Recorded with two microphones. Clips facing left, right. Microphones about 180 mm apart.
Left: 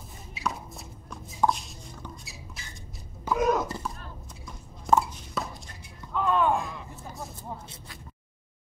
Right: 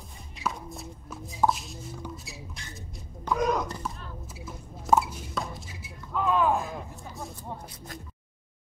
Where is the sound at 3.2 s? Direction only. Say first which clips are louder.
Left 2 dB; 5° left (ahead or behind).